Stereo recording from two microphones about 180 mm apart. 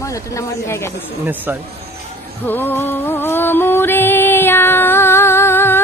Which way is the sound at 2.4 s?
10° left (ahead or behind).